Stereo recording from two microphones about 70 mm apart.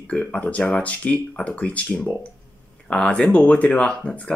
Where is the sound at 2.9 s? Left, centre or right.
Centre.